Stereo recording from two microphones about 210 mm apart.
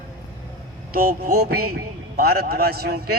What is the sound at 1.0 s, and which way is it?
Music, 90° right.